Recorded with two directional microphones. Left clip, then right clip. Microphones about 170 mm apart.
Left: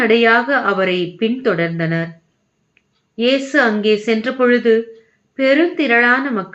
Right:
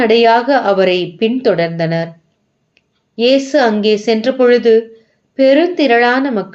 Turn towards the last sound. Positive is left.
turn(degrees=-35)  # may be behind; listen again after turning